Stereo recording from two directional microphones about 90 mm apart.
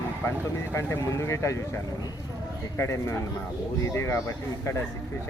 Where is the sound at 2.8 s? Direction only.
35° left (ahead or behind).